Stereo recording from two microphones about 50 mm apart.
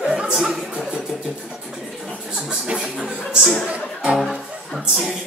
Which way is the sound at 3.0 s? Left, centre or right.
Centre.